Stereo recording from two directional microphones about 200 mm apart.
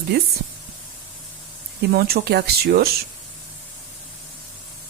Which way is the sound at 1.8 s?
50° right (ahead or behind).